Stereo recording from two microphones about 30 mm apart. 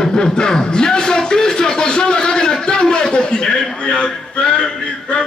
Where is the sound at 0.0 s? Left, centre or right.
Left.